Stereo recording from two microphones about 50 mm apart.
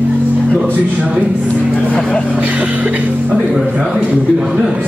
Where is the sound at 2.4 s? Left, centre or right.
Right.